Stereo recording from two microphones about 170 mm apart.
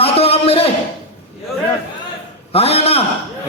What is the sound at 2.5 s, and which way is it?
Speech, 35° left (ahead or behind).